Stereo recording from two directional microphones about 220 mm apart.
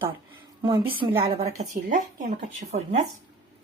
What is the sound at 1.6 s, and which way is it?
Speech, 35° right (ahead or behind).